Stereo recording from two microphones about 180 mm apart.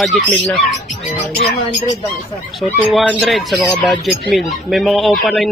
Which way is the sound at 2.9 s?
10° left (ahead or behind).